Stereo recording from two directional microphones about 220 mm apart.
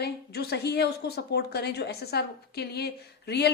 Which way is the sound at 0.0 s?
45° left (ahead or behind).